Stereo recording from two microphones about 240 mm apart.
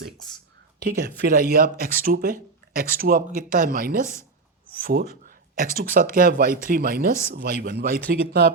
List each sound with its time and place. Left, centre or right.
0.8 s speech: right